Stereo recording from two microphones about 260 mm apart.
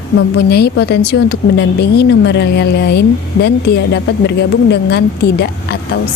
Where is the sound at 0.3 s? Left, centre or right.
Left.